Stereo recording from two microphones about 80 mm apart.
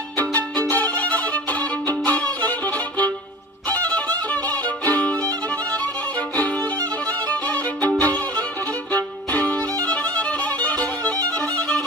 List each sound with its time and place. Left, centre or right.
0.2 s violin: left
8.0 s music: left
8.9 s violin: left
9.8 s music: centre
11.3 s violin: centre